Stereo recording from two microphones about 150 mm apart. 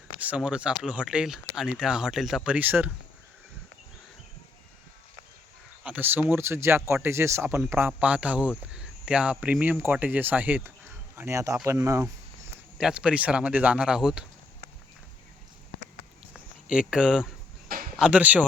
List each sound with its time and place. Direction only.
0.2 s speech: 10° right (ahead or behind)
5.8 s speech: 10° right (ahead or behind)
12.8 s speech: 5° right (ahead or behind)
16.3 s speech: 5° right (ahead or behind)